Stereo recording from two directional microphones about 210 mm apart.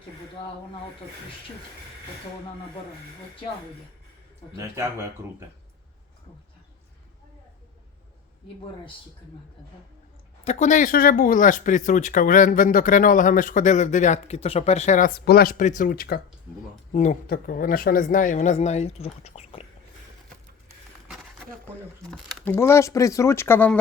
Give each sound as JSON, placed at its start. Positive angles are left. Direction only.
{"t": 4.5, "sound": "speech", "side_deg": -15}
{"t": 10.4, "sound": "speech", "side_deg": 35}
{"t": 22.0, "sound": "speech", "side_deg": 0}